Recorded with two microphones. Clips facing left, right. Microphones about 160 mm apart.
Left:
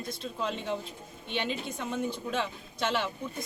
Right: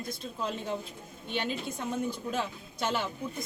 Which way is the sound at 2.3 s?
5° right (ahead or behind).